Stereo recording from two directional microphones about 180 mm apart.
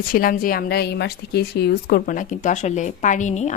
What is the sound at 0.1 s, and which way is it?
A woman's voice, 50° left (ahead or behind).